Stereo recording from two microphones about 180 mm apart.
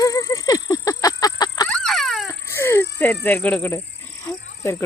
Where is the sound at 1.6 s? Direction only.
5° left (ahead or behind).